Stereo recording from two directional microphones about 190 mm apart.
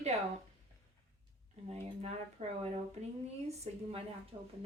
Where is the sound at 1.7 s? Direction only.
35° right (ahead or behind).